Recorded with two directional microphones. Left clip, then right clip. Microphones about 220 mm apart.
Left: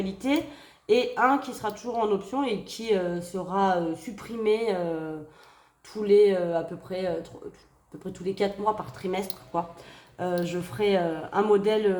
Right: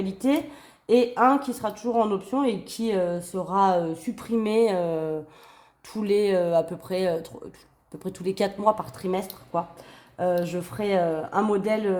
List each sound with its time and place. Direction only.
0.9 s speech: 40° right (ahead or behind)